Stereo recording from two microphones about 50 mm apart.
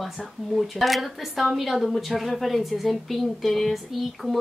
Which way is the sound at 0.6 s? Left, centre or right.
Centre.